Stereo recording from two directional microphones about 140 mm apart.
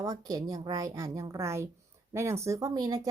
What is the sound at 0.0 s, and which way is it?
Speech, 25° right (ahead or behind).